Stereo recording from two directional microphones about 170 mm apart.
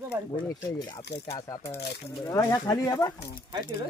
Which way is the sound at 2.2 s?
20° left (ahead or behind).